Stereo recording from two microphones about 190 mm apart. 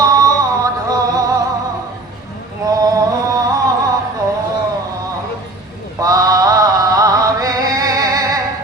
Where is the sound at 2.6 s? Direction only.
20° right (ahead or behind).